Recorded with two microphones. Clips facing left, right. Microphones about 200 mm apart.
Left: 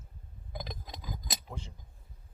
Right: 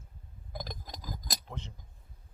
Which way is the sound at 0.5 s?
Centre (ahead or behind).